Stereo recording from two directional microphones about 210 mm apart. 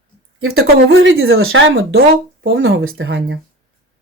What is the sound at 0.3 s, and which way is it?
Speech, 90° right.